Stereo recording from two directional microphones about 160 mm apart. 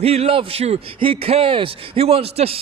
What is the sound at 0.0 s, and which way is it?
A man's voice, 40° right (ahead or behind).